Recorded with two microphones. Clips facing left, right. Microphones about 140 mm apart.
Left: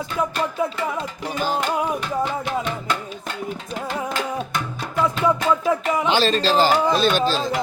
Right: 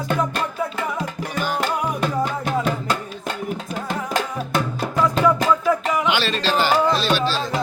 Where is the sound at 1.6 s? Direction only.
45° right (ahead or behind).